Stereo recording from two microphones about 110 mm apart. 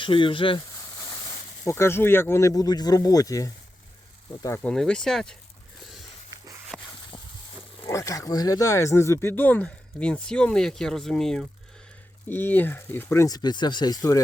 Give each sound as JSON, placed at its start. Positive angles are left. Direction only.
{"t": 0.0, "sound": "speech", "side_deg": 50}
{"t": 1.6, "sound": "speech", "side_deg": 20}
{"t": 4.6, "sound": "speech", "side_deg": 5}
{"t": 6.7, "sound": "snake", "side_deg": 0}
{"t": 7.9, "sound": "speech", "side_deg": 25}
{"t": 12.3, "sound": "speech", "side_deg": 20}
{"t": 13.2, "sound": "speech", "side_deg": 40}